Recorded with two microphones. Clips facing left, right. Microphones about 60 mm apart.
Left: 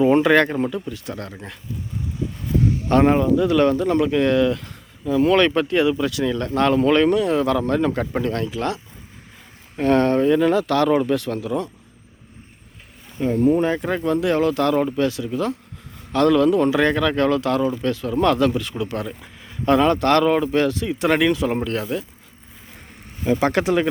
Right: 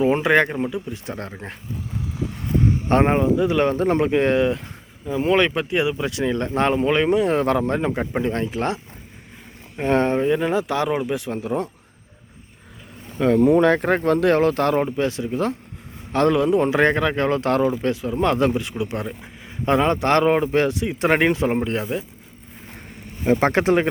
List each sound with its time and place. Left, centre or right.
0.0 s speech: centre
0.7 s speech: right
2.6 s a man's voice: right
3.8 s speech: right; by 7.2 s centre
7.2 s speech: right
7.6 s speech: right
9.7 s speech: centre
11.3 s speech: right
13.1 s speech: right
17.7 s speech: right
23.2 s speech: right